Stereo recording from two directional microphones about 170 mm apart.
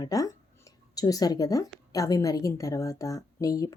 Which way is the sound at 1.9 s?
20° left (ahead or behind).